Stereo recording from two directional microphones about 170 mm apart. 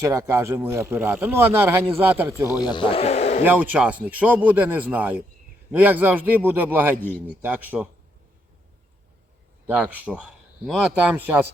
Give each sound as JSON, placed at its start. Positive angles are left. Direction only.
{"t": 0.0, "sound": "speech", "side_deg": -15}
{"t": 2.5, "sound": "a man's voice", "side_deg": 25}
{"t": 3.4, "sound": "speech", "side_deg": -10}
{"t": 9.6, "sound": "speech", "side_deg": -10}